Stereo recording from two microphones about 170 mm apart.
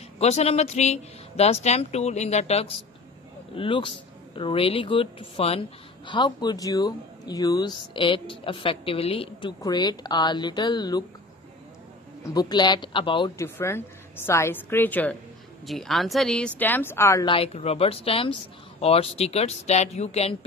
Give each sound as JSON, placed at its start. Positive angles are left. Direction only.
{"t": 0.2, "sound": "a woman's voice", "side_deg": 40}
{"t": 12.4, "sound": "a woman's voice", "side_deg": 25}
{"t": 13.4, "sound": "a woman's voice", "side_deg": 15}
{"t": 17.3, "sound": "speech", "side_deg": 35}